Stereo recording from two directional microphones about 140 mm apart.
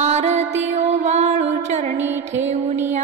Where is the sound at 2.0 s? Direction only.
15° right (ahead or behind).